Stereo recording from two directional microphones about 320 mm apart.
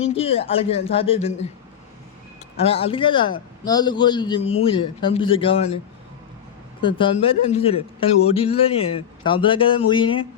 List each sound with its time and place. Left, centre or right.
0.0 s a man's voice: centre
2.6 s a man's voice: centre
6.8 s a man's voice: centre